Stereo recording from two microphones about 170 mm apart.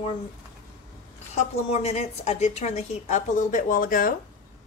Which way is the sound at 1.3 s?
40° left (ahead or behind).